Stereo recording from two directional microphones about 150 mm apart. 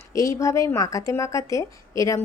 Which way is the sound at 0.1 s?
20° left (ahead or behind).